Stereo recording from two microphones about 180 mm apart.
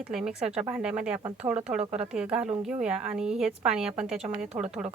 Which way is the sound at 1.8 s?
35° right (ahead or behind).